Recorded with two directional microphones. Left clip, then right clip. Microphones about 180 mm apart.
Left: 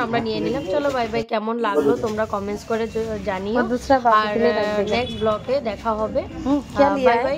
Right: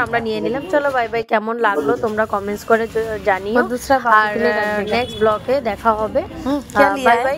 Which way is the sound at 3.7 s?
Centre (ahead or behind).